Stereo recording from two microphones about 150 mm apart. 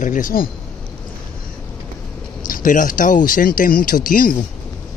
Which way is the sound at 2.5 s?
60° left (ahead or behind).